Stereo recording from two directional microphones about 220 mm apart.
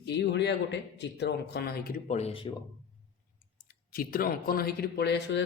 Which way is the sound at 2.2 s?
25° left (ahead or behind).